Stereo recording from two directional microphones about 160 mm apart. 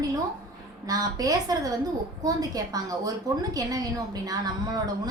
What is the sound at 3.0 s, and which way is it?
Speech, 25° right (ahead or behind).